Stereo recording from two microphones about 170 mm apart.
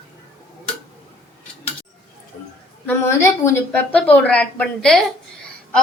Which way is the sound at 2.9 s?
15° left (ahead or behind).